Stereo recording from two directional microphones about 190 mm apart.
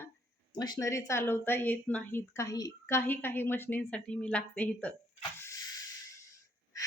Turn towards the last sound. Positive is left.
turn(degrees=20)  # may be behind; listen again after turning